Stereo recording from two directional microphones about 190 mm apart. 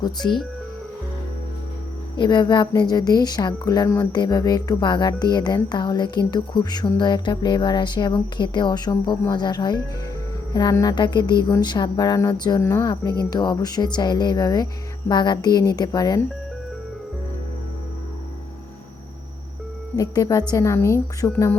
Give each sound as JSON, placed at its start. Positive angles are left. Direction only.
{"t": 2.1, "sound": "a woman's voice", "side_deg": 25}
{"t": 20.0, "sound": "a woman's voice", "side_deg": 20}